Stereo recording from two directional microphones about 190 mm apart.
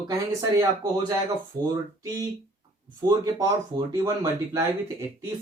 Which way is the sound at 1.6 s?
15° right (ahead or behind).